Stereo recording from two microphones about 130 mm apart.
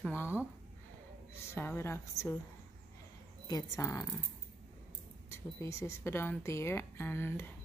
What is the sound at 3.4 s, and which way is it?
Speech, 30° left (ahead or behind).